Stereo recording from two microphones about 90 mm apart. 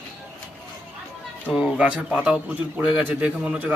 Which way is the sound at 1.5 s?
5° right (ahead or behind).